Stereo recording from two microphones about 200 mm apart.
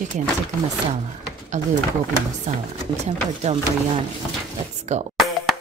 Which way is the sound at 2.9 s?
35° right (ahead or behind).